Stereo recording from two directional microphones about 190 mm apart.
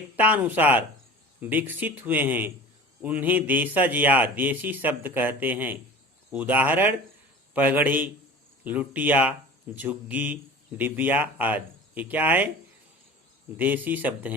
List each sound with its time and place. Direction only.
0.2 s a man's voice: 10° right (ahead or behind)
13.6 s a man's voice: 10° right (ahead or behind)